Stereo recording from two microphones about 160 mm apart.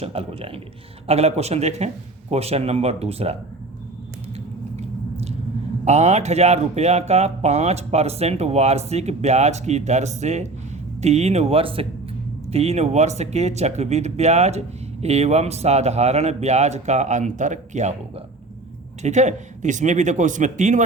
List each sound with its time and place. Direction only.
0.0 s speech: 35° right (ahead or behind)
4.4 s biting: 40° right (ahead or behind)
5.8 s speech: 45° right (ahead or behind)
19.0 s speech: 45° right (ahead or behind)